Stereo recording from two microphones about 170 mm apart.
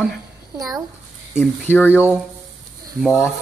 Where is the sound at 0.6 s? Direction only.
20° right (ahead or behind).